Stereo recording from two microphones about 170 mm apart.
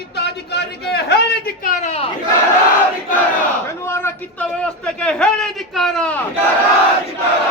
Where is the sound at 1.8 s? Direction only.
40° left (ahead or behind).